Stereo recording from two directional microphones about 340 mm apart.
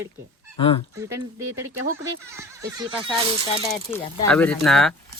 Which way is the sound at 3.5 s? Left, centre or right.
Centre.